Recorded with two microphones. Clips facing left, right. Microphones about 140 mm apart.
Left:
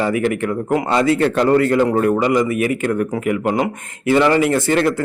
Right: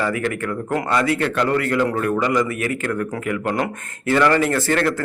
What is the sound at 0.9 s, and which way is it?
Speech, 30° left (ahead or behind).